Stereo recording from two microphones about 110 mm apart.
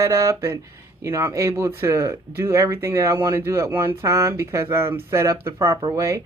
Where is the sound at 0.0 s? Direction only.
30° right (ahead or behind).